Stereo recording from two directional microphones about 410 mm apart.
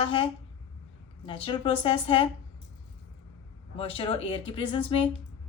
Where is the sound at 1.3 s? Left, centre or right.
Centre.